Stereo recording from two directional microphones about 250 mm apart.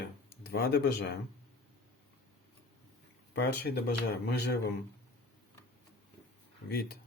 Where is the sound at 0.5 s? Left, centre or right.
Left.